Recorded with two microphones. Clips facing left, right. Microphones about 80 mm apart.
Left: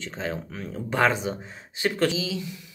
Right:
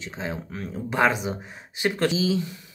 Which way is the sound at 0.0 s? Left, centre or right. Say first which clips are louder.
Left 1 dB; centre.